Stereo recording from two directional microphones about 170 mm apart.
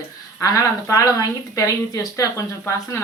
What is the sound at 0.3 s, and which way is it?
Speech, 20° left (ahead or behind).